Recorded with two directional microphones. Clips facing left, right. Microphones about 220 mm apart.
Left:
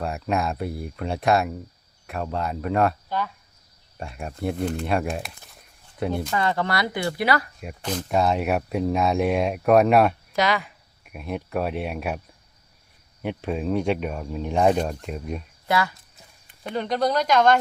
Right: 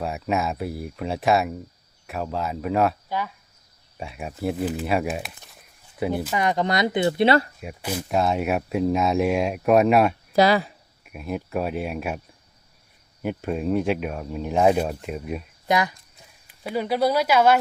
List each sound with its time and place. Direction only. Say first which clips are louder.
0.0 s speech: even; centre (ahead or behind)
6.3 s speech: right 2 dB; 15° right (ahead or behind)
7.6 s speech: even; 5° right (ahead or behind)
10.3 s speech: right 8 dB; 35° right (ahead or behind)
11.0 s speech: right 1 dB; centre (ahead or behind)
13.2 s speech: right 1 dB; centre (ahead or behind)
15.6 s speech: right 1 dB; 15° right (ahead or behind)
16.5 s speech: right 2 dB; 5° right (ahead or behind)